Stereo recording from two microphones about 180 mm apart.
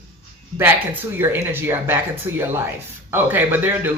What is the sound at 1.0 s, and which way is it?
Speech, 10° right (ahead or behind).